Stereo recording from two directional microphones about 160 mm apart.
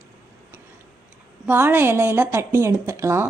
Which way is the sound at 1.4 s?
10° right (ahead or behind).